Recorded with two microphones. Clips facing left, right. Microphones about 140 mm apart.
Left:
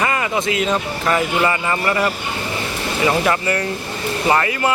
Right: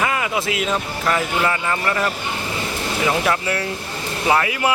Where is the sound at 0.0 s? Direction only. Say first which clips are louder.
Left 2 dB; centre (ahead or behind).